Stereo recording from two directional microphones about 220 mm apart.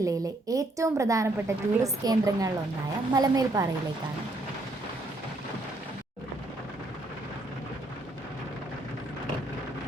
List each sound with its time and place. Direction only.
0.0 s a woman's voice: 15° right (ahead or behind)